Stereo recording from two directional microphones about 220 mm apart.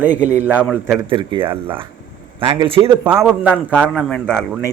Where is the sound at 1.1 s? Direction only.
20° right (ahead or behind).